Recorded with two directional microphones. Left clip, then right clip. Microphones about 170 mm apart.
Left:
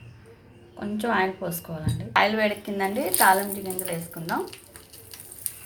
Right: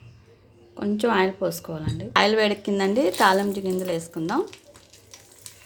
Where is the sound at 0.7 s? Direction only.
65° right (ahead or behind); by 3.4 s 90° right.